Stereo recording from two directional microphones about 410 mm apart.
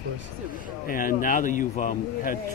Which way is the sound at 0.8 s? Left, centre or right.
Centre.